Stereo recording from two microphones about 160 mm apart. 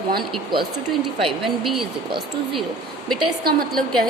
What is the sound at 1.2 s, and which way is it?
Speech, centre (ahead or behind).